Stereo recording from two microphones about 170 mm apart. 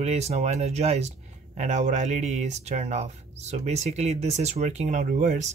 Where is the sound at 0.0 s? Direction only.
40° right (ahead or behind).